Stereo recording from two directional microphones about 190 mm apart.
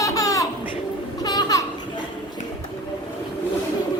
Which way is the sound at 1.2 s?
20° left (ahead or behind).